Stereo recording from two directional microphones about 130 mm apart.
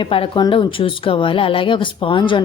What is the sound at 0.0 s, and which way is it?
Speech, 45° left (ahead or behind).